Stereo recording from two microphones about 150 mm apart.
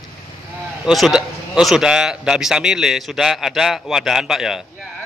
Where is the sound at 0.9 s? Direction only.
Centre (ahead or behind).